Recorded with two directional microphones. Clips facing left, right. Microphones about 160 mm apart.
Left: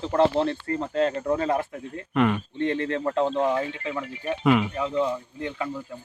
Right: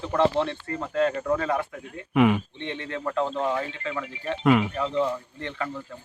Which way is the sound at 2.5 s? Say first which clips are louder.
Left 8 dB; 40° left (ahead or behind).